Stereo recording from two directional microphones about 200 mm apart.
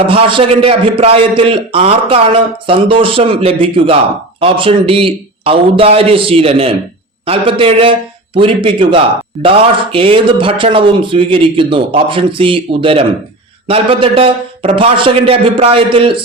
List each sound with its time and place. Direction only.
0.1 s a man's voice: 25° right (ahead or behind)